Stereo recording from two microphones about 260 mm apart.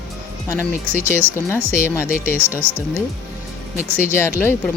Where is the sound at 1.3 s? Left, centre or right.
Centre.